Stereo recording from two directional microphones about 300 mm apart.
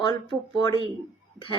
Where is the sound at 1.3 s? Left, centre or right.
Centre.